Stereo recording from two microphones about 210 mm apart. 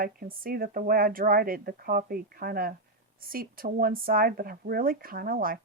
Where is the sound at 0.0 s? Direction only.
45° right (ahead or behind).